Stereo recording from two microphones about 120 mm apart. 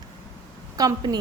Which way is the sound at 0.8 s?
35° right (ahead or behind).